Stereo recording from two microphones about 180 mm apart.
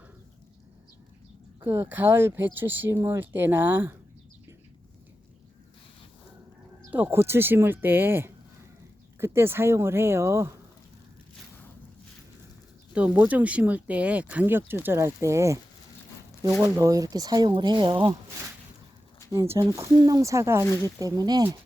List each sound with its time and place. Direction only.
1.6 s speech: 15° right (ahead or behind)
6.9 s speech: 10° right (ahead or behind)
12.9 s speech: 10° right (ahead or behind)
16.6 s speech: 20° right (ahead or behind)
19.3 s speech: 20° right (ahead or behind)